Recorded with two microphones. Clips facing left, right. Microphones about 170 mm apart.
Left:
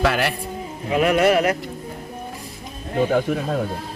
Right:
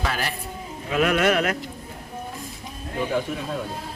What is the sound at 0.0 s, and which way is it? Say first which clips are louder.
Speech: left 7 dB; 65° left (ahead or behind).